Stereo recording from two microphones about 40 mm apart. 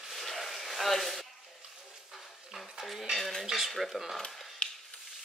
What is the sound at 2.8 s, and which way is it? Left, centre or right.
Speech, centre.